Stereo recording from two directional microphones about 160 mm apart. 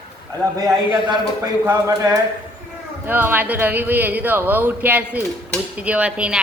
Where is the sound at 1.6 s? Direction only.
20° right (ahead or behind).